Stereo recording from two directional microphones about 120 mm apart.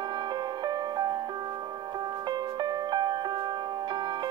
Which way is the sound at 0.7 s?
35° right (ahead or behind).